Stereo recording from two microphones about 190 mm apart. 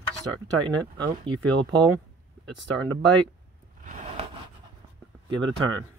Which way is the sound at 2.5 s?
5° left (ahead or behind).